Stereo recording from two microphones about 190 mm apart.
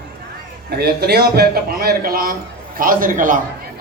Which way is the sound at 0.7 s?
55° right (ahead or behind).